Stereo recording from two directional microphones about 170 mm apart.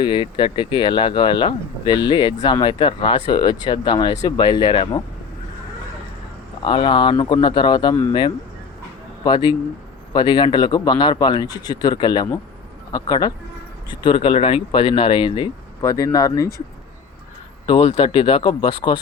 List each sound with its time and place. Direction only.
0.0 s speech: 30° left (ahead or behind)
6.7 s speech: 30° left (ahead or behind)
15.8 s speech: 20° left (ahead or behind)
17.7 s speech: 35° left (ahead or behind)